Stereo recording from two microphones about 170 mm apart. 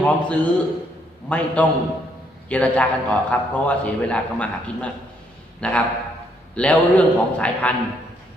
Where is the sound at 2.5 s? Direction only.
10° left (ahead or behind).